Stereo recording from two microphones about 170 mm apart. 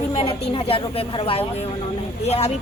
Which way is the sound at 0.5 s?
35° left (ahead or behind).